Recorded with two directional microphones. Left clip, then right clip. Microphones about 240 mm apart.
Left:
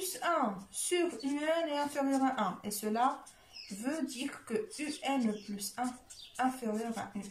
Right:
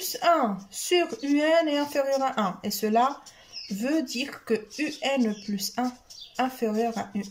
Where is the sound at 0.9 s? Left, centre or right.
Right.